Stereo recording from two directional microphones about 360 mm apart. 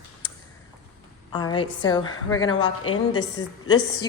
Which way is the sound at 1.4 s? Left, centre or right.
Centre.